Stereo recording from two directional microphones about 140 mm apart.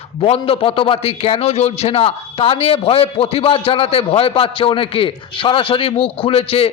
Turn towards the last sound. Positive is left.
turn(degrees=45)  # may be behind; listen again after turning